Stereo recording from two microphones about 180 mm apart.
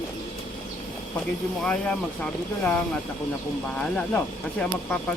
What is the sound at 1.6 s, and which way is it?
Speech, 5° left (ahead or behind).